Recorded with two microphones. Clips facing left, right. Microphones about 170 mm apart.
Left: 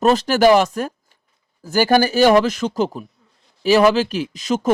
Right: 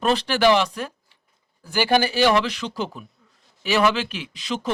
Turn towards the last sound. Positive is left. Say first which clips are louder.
# left 8 dB
turn(degrees=45)  # may be behind; listen again after turning